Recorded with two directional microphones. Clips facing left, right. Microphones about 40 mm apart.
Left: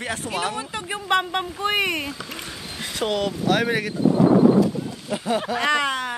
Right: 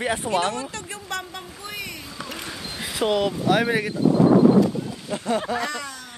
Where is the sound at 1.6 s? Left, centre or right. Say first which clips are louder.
Left 13 dB; left.